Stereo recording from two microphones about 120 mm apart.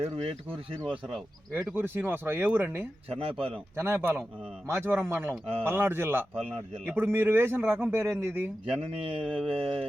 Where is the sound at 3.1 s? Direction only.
50° right (ahead or behind).